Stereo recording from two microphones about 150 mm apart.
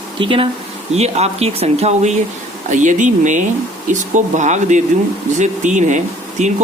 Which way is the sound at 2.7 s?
55° right (ahead or behind).